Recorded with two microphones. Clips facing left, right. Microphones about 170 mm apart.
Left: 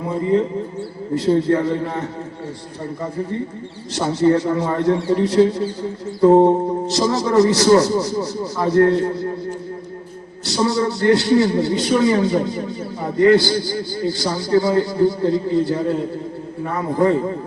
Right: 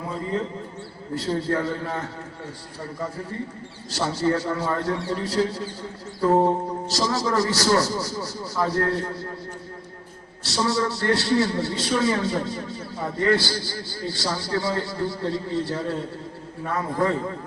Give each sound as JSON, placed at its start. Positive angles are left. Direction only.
{"t": 1.3, "sound": "a man's voice", "side_deg": 25}
{"t": 3.9, "sound": "a man's voice", "side_deg": 20}
{"t": 10.6, "sound": "a man's voice", "side_deg": 20}